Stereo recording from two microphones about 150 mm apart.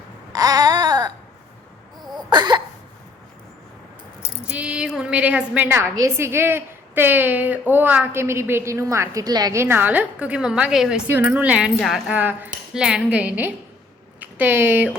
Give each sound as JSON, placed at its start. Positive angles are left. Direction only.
{"t": 0.3, "sound": "baby cry", "side_deg": -25}
{"t": 2.1, "sound": "cough", "side_deg": -30}
{"t": 4.4, "sound": "a woman's voice", "side_deg": -10}